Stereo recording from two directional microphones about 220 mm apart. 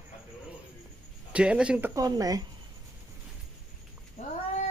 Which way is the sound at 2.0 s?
15° right (ahead or behind).